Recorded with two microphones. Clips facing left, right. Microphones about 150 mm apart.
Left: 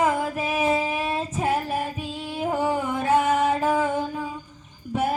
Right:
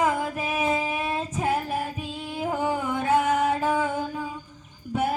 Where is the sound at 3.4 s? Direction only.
25° left (ahead or behind).